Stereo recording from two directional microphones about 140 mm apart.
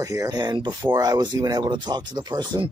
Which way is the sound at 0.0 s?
25° right (ahead or behind).